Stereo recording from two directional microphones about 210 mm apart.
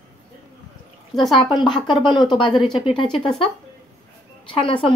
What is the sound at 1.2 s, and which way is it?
Speech, centre (ahead or behind).